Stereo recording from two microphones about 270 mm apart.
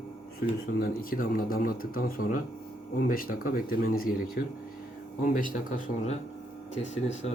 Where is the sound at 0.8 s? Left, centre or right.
Left.